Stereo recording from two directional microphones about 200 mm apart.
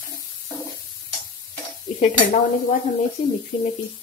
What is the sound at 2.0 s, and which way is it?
Stir, 40° left (ahead or behind).